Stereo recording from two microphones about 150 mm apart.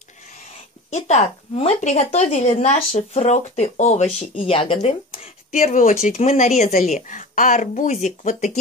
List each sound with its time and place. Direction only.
0.8 s speech: 50° left (ahead or behind)
5.5 s speech: 60° left (ahead or behind)